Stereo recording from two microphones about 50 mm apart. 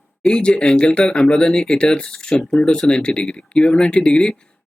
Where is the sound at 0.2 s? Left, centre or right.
Centre.